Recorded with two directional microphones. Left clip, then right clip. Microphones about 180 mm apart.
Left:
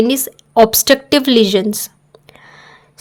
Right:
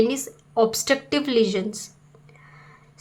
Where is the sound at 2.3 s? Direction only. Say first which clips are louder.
Left 9 dB; 45° left (ahead or behind).